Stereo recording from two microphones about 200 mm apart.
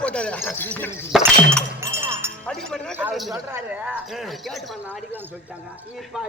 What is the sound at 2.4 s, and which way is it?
Speech, 5° left (ahead or behind).